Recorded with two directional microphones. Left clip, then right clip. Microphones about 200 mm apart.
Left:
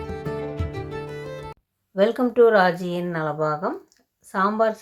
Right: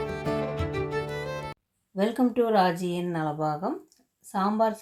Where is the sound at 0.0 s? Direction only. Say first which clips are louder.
Right 1 dB; centre (ahead or behind).